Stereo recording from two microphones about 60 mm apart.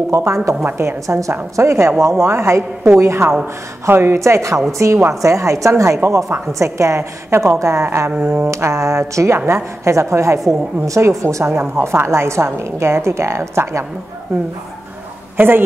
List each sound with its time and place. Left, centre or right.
0.1 s a woman's voice: right
1.0 s a woman's voice: right
1.3 s a woman's voice: right
4.2 s a woman's voice: right
15.3 s a woman's voice: right